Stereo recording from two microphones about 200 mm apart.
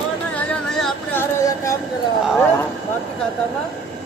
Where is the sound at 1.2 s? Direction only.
15° left (ahead or behind).